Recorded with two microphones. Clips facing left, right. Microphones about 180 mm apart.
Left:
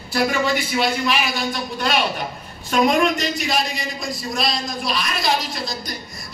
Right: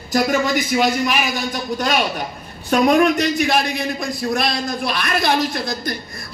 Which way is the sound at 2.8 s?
60° right (ahead or behind).